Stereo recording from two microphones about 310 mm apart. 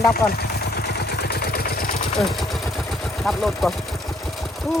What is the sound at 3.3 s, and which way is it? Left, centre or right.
Speech, centre.